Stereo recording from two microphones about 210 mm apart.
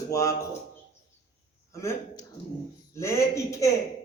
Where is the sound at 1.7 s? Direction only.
15° left (ahead or behind).